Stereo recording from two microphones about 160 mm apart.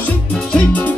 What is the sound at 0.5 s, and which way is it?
Music, 10° left (ahead or behind).